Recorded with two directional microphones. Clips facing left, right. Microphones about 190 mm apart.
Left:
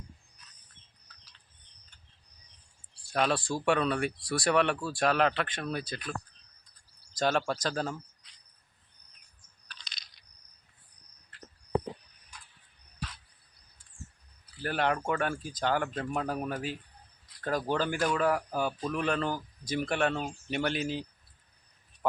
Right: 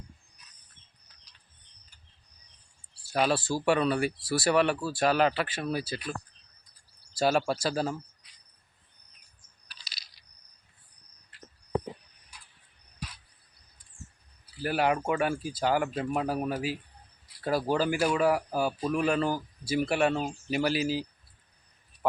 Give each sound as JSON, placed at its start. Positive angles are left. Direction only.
{"t": 3.1, "sound": "speech", "side_deg": -5}
{"t": 9.6, "sound": "a sound", "side_deg": -5}
{"t": 14.6, "sound": "speech", "side_deg": -10}